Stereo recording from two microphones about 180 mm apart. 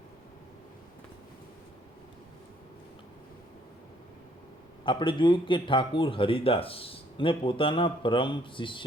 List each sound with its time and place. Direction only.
4.9 s speech: 25° left (ahead or behind)